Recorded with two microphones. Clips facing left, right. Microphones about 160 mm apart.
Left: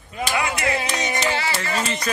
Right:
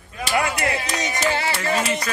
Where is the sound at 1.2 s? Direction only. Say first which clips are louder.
Right 1 dB; 50° right (ahead or behind).